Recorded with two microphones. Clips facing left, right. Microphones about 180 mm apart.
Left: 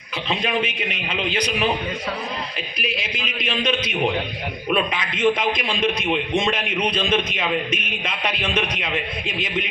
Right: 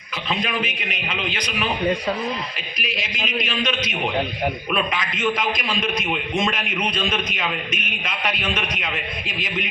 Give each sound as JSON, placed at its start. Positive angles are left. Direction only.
{"t": 0.3, "sound": "a man's voice", "side_deg": 30}
{"t": 2.7, "sound": "a man's voice", "side_deg": 30}